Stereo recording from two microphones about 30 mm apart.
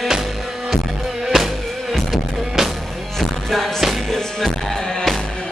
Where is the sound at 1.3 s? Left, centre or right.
Centre.